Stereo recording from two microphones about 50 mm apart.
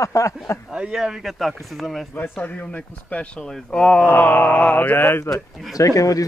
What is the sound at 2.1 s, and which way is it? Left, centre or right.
Speech, left.